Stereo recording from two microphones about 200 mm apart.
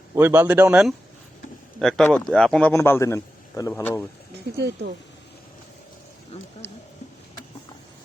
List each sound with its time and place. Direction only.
0.1 s a man's voice: 10° right (ahead or behind); by 4.0 s 10° left (ahead or behind)
4.5 s speech: 55° right (ahead or behind)
6.3 s speech: 35° left (ahead or behind)